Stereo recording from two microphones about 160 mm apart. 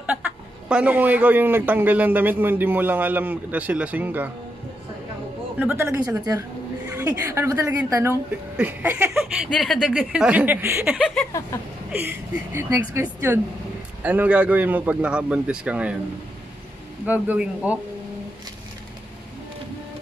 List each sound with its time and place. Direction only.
0.0 s speech: 10° right (ahead or behind)
5.6 s speech: 10° right (ahead or behind)
9.1 s speech: centre (ahead or behind)
17.0 s speech: 10° right (ahead or behind)